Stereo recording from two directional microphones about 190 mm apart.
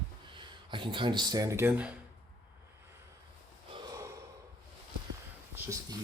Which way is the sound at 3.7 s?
20° right (ahead or behind).